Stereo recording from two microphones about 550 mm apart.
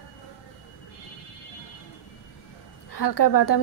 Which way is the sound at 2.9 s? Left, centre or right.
Left.